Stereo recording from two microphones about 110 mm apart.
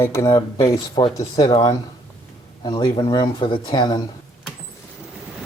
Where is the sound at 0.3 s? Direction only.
30° left (ahead or behind).